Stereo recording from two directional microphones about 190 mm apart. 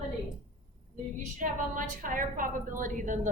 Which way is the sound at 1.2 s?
40° right (ahead or behind).